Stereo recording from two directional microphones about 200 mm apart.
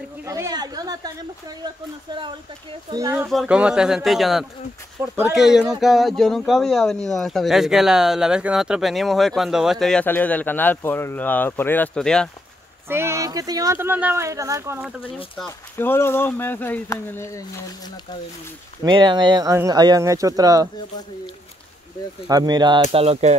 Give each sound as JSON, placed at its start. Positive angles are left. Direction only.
{"t": 0.2, "sound": "speech", "side_deg": -15}
{"t": 3.3, "sound": "speech", "side_deg": -5}
{"t": 5.0, "sound": "speech", "side_deg": -10}
{"t": 12.8, "sound": "speech", "side_deg": -10}
{"t": 15.3, "sound": "speech", "side_deg": 10}
{"t": 18.9, "sound": "speech", "side_deg": -20}
{"t": 22.3, "sound": "speech", "side_deg": -20}
{"t": 22.8, "sound": "speech", "side_deg": -30}